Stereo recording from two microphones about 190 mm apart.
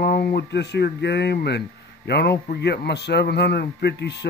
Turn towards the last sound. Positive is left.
turn(degrees=60)  # may be behind; listen again after turning